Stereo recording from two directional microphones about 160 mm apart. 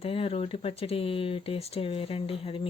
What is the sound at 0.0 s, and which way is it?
Speech, 35° left (ahead or behind).